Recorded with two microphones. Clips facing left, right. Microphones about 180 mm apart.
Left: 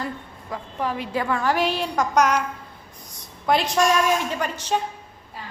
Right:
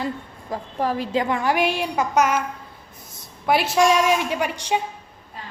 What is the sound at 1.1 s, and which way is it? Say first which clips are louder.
A woman's voice: even; 20° right (ahead or behind).